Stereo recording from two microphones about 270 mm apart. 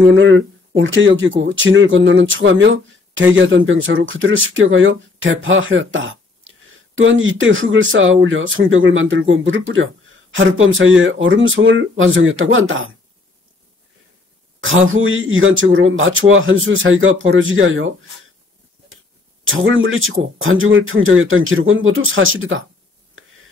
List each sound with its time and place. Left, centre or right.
0.0 s speech: right
14.6 s speech: right
19.4 s speech: right